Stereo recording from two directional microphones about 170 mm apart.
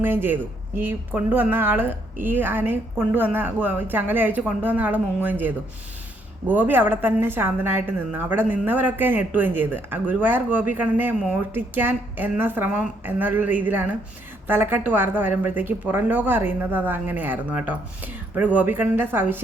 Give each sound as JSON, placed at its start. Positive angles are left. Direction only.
{"t": 0.0, "sound": "a woman's voice", "side_deg": -10}